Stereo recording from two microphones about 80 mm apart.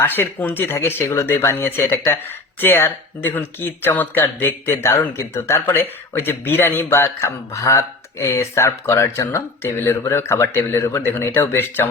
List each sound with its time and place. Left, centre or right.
0.0 s speech: left